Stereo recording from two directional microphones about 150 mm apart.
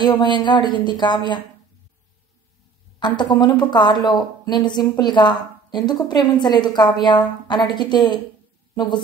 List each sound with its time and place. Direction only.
0.0 s speech: 30° left (ahead or behind)
3.2 s speech: 30° left (ahead or behind)